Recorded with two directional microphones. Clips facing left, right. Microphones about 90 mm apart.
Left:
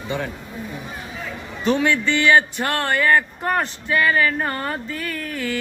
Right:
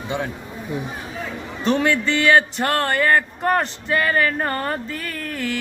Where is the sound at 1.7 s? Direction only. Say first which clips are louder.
Even; 40° right (ahead or behind).